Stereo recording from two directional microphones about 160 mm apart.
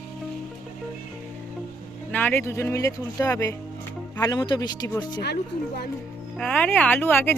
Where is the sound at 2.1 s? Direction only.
10° left (ahead or behind); by 5.2 s 25° left (ahead or behind).